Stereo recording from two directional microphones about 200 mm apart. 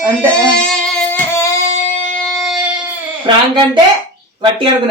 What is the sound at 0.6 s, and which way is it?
Music, 5° left (ahead or behind).